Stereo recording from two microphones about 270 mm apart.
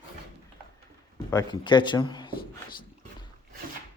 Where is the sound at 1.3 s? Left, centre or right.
Centre.